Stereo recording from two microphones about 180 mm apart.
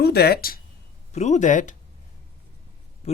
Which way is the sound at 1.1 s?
40° left (ahead or behind).